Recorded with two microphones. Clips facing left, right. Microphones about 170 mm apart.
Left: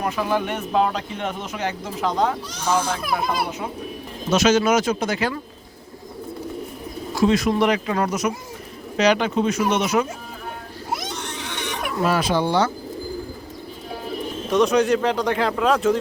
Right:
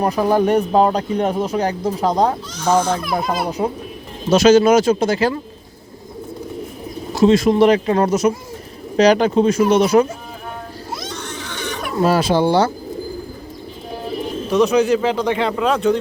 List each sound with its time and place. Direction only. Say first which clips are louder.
0.0 s speech: right 7 dB; 40° right (ahead or behind)
7.1 s speech: right 6 dB; 25° right (ahead or behind)
10.9 s baby cry: left 1 dB; 20° left (ahead or behind)
12.0 s speech: right 5 dB; 30° right (ahead or behind)
14.5 s speech: right 3 dB; centre (ahead or behind)